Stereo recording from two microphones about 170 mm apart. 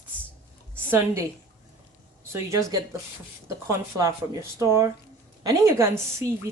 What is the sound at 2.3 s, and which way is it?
A woman's voice, 15° right (ahead or behind).